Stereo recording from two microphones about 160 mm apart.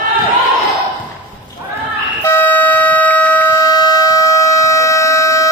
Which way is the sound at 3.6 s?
25° left (ahead or behind).